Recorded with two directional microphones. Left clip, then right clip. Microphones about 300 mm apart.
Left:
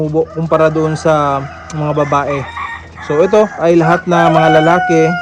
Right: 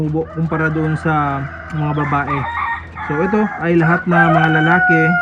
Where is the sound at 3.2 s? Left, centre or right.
Centre.